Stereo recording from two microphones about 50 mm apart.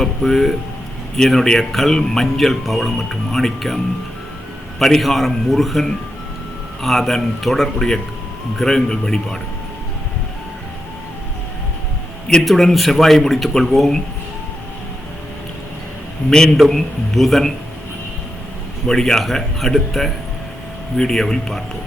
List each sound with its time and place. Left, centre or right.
0.0 s speech: centre
4.8 s speech: centre
12.5 s speech: centre
16.6 s speech: centre
18.9 s speech: centre